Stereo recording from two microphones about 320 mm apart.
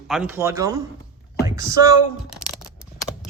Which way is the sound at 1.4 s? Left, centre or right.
Centre.